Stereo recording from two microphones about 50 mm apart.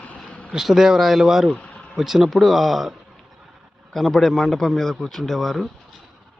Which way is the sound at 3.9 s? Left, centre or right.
Centre.